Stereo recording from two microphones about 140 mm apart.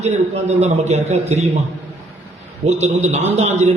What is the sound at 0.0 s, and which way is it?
A man's voice, 50° right (ahead or behind).